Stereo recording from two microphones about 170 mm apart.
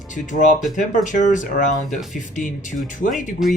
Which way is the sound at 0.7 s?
50° left (ahead or behind).